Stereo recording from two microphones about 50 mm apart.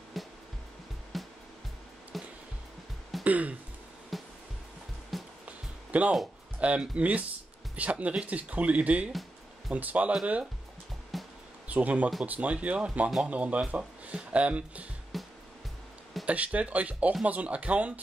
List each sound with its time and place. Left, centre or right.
0.2 s music: centre
3.3 s speech: right
4.1 s music: centre
5.4 s music: right
6.6 s speech: right
11.1 s music: centre
11.6 s speech: right
15.1 s music: centre
16.3 s speech: right